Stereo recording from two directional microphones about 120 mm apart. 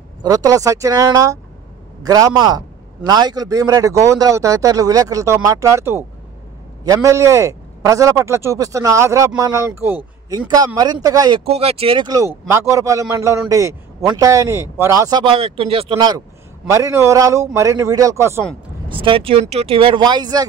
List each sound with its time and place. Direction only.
0.2 s a man's voice: 30° right (ahead or behind)
10.5 s speech: 35° right (ahead or behind)
11.5 s speech: 55° right (ahead or behind)
12.4 s a man's voice: 25° right (ahead or behind)
15.2 s speech: 50° right (ahead or behind)
16.6 s a man's voice: 25° right (ahead or behind)
18.9 s speech: 45° right (ahead or behind)